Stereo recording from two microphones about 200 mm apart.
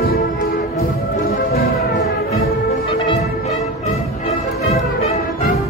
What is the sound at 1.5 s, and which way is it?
Music, 50° left (ahead or behind).